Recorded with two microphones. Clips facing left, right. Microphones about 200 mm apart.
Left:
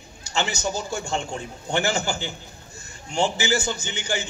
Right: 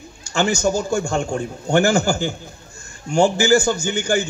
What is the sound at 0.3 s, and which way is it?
A man's voice, 50° right (ahead or behind).